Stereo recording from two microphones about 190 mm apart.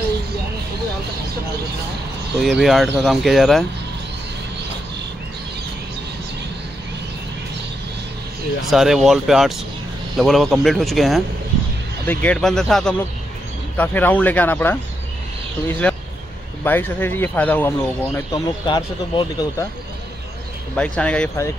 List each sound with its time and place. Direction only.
2.4 s speech: centre (ahead or behind)
8.6 s speech: centre (ahead or behind)
15.8 s vehicle: 5° left (ahead or behind)
16.6 s speech: 10° left (ahead or behind)
18.7 s speech: 25° left (ahead or behind)
20.7 s speech: 5° left (ahead or behind)